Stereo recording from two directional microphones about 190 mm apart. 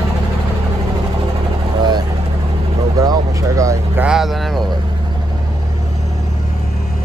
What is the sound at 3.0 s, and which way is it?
Vehicle, 15° right (ahead or behind).